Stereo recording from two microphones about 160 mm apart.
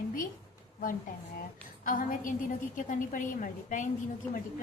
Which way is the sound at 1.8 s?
60° left (ahead or behind).